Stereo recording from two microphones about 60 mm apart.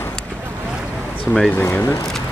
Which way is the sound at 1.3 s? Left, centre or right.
Left.